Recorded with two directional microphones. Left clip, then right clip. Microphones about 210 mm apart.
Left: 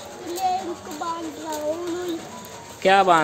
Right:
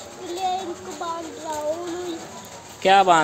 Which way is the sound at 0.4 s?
Centre (ahead or behind).